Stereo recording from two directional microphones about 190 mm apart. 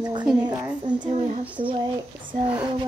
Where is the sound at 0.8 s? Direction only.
25° right (ahead or behind).